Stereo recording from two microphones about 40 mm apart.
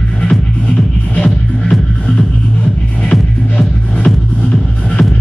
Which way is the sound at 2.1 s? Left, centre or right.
Left.